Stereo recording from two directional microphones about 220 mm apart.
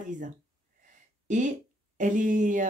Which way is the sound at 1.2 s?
35° right (ahead or behind).